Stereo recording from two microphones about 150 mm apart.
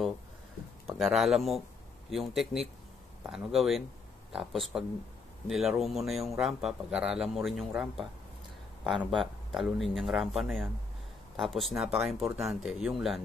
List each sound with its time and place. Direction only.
0.8 s speech: centre (ahead or behind)